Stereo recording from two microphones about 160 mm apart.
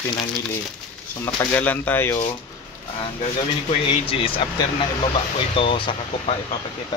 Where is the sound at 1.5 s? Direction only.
10° left (ahead or behind).